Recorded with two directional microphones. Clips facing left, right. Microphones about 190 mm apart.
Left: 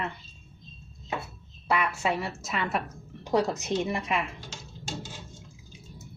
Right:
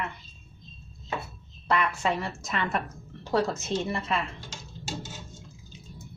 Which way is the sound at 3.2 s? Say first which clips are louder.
Left 1 dB; 15° left (ahead or behind).